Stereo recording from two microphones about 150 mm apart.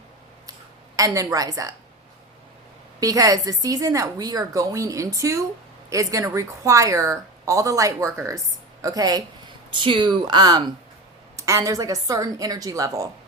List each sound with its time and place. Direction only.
0.9 s a woman's voice: 20° right (ahead or behind)
3.0 s a woman's voice: 25° right (ahead or behind)